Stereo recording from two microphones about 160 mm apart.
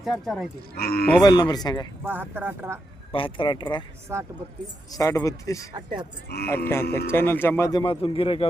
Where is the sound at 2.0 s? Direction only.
10° right (ahead or behind).